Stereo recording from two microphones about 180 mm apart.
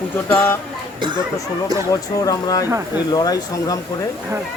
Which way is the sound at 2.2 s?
20° left (ahead or behind).